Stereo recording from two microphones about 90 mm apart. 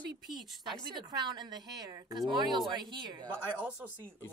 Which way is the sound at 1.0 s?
55° right (ahead or behind).